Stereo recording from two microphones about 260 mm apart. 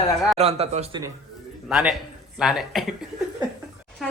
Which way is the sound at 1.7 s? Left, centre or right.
Centre.